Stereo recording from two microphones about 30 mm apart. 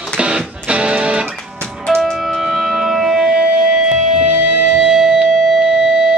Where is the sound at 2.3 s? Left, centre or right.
Centre.